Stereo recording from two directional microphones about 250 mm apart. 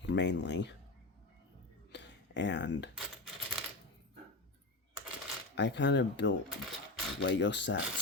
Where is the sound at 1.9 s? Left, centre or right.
Left.